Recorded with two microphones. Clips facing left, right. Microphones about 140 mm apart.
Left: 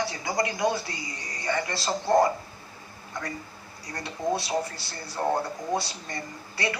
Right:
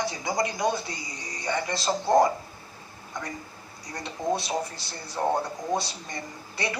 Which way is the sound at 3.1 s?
20° right (ahead or behind).